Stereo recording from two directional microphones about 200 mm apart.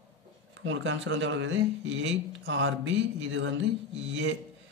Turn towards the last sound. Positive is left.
turn(degrees=-70)  # may be behind; listen again after turning